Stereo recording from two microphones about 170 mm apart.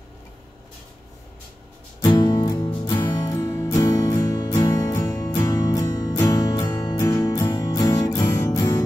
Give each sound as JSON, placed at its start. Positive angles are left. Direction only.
{"t": 2.0, "sound": "music", "side_deg": 25}